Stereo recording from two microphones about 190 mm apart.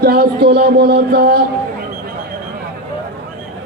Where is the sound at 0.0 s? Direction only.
55° right (ahead or behind).